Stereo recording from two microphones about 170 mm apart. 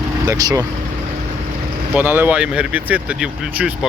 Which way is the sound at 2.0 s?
10° right (ahead or behind).